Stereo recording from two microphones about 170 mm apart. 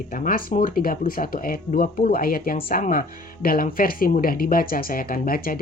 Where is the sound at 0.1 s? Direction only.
60° left (ahead or behind).